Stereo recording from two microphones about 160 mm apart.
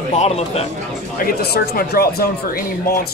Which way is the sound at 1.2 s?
65° left (ahead or behind).